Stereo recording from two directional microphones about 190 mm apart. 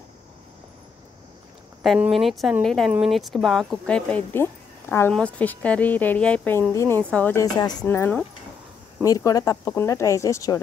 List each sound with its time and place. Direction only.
1.8 s speech: centre (ahead or behind); by 10.6 s 15° left (ahead or behind)